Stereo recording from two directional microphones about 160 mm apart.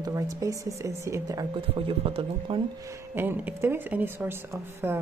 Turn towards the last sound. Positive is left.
turn(degrees=-15)  # may be behind; listen again after turning